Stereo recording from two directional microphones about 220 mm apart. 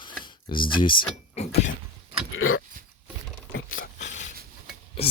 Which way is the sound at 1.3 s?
30° left (ahead or behind).